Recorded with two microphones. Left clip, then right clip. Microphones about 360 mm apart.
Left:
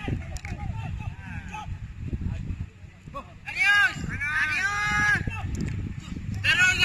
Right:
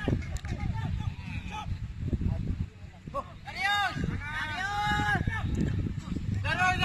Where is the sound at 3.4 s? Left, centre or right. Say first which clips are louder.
Left 8 dB; right.